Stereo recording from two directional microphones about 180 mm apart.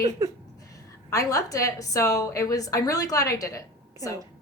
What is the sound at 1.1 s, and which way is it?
A woman's voice, 20° left (ahead or behind).